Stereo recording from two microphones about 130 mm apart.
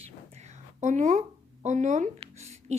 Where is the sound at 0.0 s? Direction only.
60° right (ahead or behind).